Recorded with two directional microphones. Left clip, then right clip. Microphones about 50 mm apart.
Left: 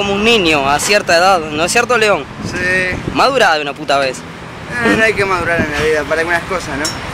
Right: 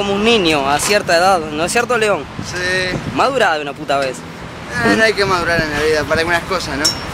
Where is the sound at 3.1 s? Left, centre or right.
Left.